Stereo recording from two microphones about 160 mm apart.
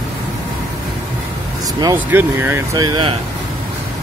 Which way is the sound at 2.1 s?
15° right (ahead or behind).